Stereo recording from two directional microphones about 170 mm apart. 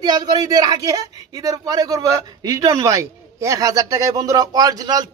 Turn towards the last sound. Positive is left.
turn(degrees=-20)  # may be behind; listen again after turning